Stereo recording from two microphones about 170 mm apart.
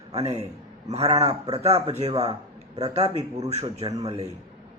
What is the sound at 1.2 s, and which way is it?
Speech, 20° right (ahead or behind).